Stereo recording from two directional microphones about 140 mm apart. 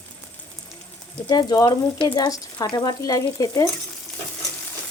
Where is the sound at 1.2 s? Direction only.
30° left (ahead or behind).